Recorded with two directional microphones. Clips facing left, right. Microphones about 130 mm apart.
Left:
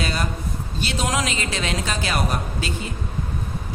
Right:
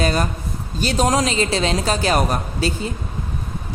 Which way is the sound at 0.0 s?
45° right (ahead or behind).